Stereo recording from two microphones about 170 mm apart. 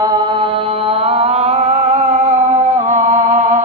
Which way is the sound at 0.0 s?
25° right (ahead or behind).